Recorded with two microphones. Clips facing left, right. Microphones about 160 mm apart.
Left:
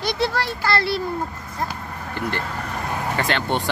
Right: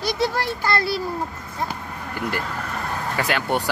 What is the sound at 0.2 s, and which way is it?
Speech, 15° right (ahead or behind).